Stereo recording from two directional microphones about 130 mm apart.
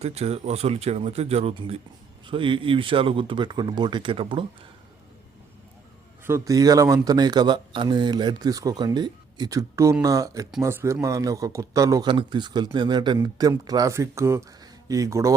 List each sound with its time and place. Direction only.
0.0 s speech: 55° right (ahead or behind)
6.2 s a man's voice: 20° right (ahead or behind)
12.0 s speech: 35° right (ahead or behind)
13.5 s a man's voice: 25° right (ahead or behind)